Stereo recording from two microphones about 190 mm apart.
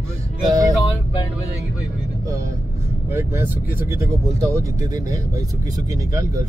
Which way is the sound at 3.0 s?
10° right (ahead or behind).